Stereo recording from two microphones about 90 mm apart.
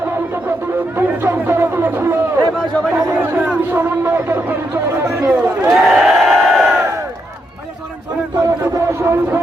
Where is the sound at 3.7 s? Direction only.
25° right (ahead or behind).